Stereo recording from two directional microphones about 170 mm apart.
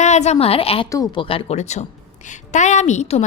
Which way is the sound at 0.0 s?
40° left (ahead or behind).